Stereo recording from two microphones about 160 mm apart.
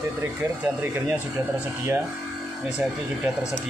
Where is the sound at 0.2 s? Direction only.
15° right (ahead or behind).